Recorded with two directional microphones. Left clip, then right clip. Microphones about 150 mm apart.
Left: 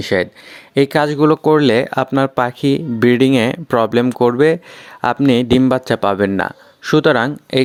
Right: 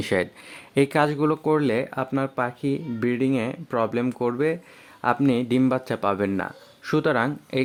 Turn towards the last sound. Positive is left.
turn(degrees=50)  # may be behind; listen again after turning